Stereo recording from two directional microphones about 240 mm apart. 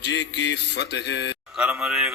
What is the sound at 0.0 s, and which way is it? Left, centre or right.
Mantra, left.